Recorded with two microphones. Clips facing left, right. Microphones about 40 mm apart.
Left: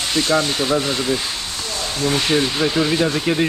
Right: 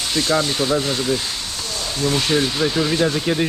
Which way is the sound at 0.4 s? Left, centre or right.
Centre.